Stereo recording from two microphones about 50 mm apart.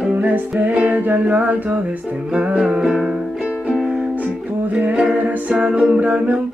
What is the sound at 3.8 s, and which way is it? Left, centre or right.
Music, right.